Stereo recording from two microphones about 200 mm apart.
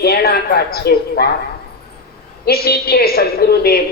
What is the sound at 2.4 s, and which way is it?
A woman's voice, 50° left (ahead or behind).